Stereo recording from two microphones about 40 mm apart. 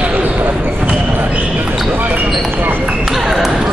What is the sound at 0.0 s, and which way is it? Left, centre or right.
Basketball bounce, right.